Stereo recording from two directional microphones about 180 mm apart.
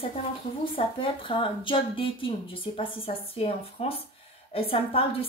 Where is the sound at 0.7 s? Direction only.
30° left (ahead or behind).